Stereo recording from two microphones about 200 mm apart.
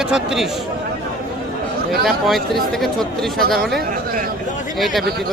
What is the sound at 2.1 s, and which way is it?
Speech, centre (ahead or behind).